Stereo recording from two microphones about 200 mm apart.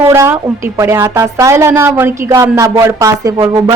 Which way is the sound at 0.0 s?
10° right (ahead or behind).